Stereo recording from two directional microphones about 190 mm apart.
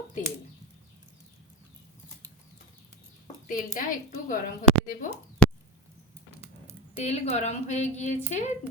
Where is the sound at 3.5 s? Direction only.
45° left (ahead or behind).